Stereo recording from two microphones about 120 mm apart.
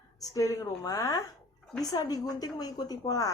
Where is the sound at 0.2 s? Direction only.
30° left (ahead or behind).